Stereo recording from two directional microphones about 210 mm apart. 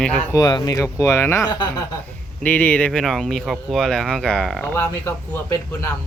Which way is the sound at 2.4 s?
5° left (ahead or behind).